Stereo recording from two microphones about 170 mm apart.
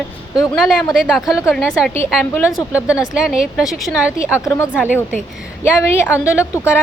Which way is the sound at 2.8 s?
5° right (ahead or behind).